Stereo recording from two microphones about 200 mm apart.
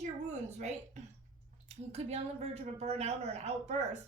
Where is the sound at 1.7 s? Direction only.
35° right (ahead or behind).